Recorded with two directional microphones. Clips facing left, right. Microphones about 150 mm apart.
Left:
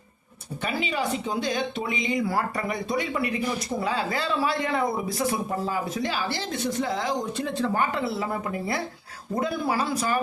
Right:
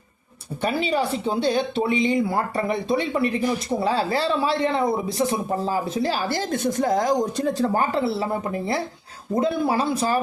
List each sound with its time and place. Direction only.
0.8 s speech: 35° right (ahead or behind)